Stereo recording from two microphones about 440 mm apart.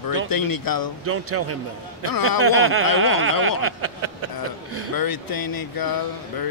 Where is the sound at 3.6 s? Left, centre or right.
Right.